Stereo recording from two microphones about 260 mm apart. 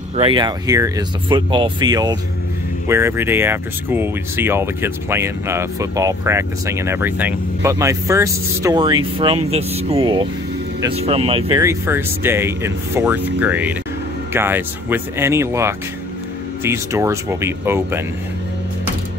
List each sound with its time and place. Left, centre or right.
0.1 s speech: right